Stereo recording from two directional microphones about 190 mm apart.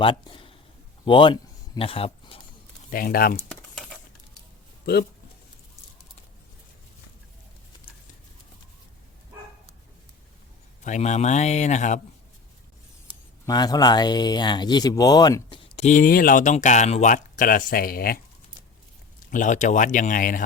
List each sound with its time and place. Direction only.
0.0 s speech: 25° left (ahead or behind)
2.9 s speech: 50° left (ahead or behind)
3.5 s a sound: centre (ahead or behind)
10.8 s speech: 40° left (ahead or behind)
13.1 s speech: 20° left (ahead or behind); by 18.2 s 50° left (ahead or behind)
19.3 s speech: 40° left (ahead or behind)